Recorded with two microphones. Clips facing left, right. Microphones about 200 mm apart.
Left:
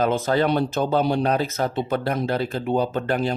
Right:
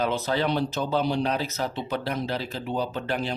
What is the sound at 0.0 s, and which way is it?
Speech, 50° left (ahead or behind).